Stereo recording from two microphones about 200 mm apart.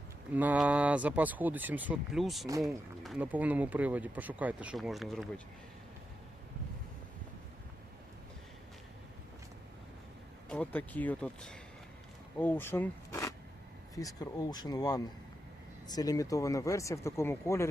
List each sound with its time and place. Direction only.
0.3 s speech: 10° right (ahead or behind)
10.5 s speech: 5° left (ahead or behind)